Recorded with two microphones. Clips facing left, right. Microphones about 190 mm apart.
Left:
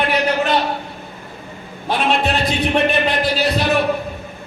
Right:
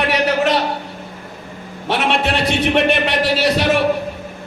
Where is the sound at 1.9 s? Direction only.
80° right.